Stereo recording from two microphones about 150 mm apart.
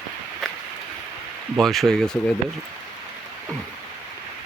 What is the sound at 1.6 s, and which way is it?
Speech, centre (ahead or behind).